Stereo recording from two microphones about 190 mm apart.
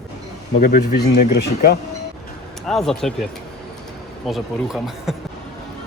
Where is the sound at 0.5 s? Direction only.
50° left (ahead or behind).